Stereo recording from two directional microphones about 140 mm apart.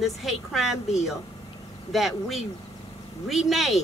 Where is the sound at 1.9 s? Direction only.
Centre (ahead or behind).